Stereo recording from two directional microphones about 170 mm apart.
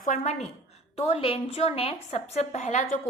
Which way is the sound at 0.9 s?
35° left (ahead or behind).